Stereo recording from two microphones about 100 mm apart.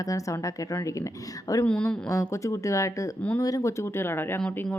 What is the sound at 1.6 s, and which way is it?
Speech, 10° left (ahead or behind).